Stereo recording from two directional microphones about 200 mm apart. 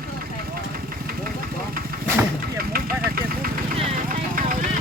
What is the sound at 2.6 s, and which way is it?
Vehicle, 50° right (ahead or behind).